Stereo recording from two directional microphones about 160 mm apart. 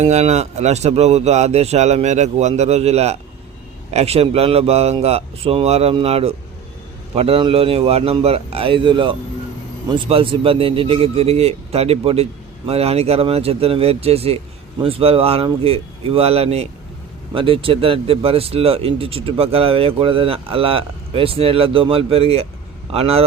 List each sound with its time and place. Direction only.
0.0 s a man's voice: 45° right (ahead or behind)